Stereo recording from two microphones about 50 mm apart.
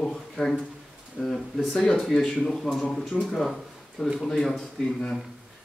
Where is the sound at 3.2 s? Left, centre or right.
Centre.